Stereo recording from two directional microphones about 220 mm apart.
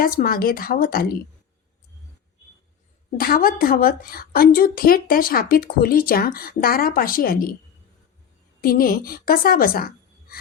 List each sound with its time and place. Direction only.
0.0 s a woman's voice: 40° left (ahead or behind)
3.2 s a woman's voice: 40° left (ahead or behind)
8.6 s speech: 40° left (ahead or behind)